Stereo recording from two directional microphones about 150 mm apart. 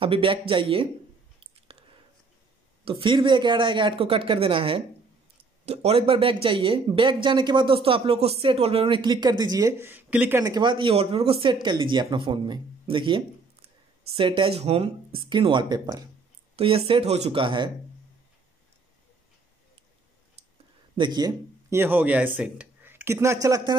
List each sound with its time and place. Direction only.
0.0 s speech: 35° right (ahead or behind)
2.8 s speech: 35° right (ahead or behind); by 10.4 s 10° right (ahead or behind)
10.4 s speech: 30° right (ahead or behind)
16.5 s speech: 40° right (ahead or behind)
20.9 s speech: 30° right (ahead or behind)
21.7 s speech: 15° right (ahead or behind)